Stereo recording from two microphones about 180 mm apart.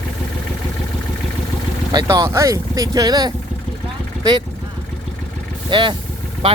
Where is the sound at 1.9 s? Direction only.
20° right (ahead or behind).